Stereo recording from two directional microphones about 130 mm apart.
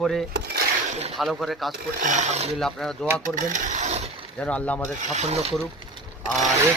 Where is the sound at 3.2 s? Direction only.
90° right; by 4.1 s 60° right (ahead or behind).